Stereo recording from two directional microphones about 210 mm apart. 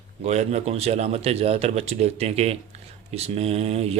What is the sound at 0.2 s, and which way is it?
A man's voice, 30° right (ahead or behind).